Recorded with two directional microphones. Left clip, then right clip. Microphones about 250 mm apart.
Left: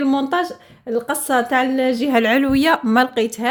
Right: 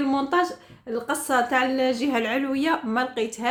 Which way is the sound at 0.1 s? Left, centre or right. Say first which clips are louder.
Left 3 dB; left.